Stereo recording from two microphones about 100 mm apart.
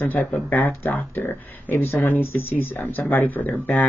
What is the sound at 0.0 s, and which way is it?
Speech, 20° left (ahead or behind).